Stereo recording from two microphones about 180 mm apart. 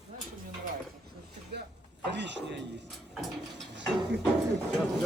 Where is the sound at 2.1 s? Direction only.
80° right.